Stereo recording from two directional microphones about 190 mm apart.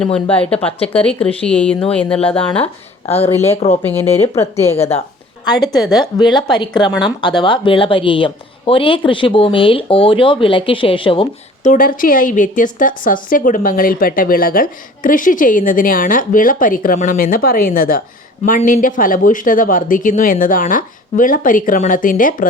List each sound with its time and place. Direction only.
0.0 s speech: 5° left (ahead or behind)
3.5 s speech: 35° left (ahead or behind)
3.8 s speech: 10° left (ahead or behind)
5.5 s a woman's voice: 20° left (ahead or behind); by 22.4 s 45° left (ahead or behind)